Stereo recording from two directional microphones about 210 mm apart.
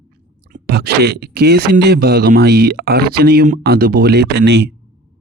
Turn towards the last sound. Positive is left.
turn(degrees=-55)  # may be behind; listen again after turning